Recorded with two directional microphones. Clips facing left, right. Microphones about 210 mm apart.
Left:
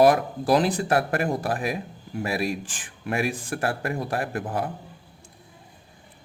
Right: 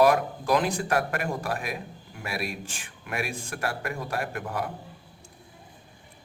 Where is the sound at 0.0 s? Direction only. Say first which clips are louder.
Left 3 dB; 35° left (ahead or behind).